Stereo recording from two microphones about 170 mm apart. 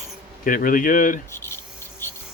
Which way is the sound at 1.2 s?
15° left (ahead or behind).